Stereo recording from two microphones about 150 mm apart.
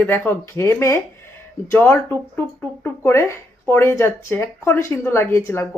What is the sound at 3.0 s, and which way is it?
Speech, 20° left (ahead or behind).